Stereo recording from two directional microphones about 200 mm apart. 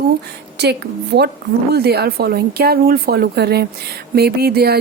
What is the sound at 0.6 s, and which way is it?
A woman's voice, 55° right (ahead or behind).